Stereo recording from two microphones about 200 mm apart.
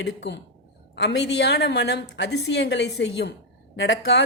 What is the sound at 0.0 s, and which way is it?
Speech, 60° left (ahead or behind).